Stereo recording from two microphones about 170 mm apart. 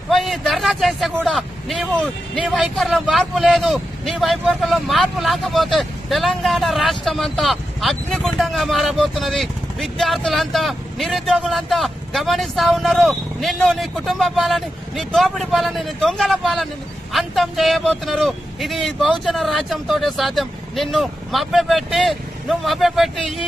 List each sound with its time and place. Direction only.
0.1 s vehicle: centre (ahead or behind)
2.3 s speech: centre (ahead or behind)